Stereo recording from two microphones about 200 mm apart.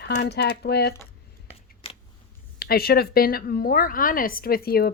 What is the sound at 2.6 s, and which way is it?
Speech, 50° left (ahead or behind).